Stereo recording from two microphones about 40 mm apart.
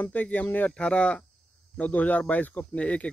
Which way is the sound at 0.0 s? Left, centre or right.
Left.